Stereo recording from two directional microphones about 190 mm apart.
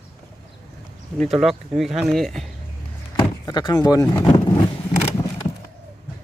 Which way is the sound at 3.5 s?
20° left (ahead or behind).